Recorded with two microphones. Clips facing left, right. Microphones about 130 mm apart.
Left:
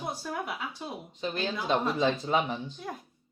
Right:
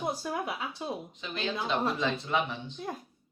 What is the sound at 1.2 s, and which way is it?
Speech, 45° left (ahead or behind).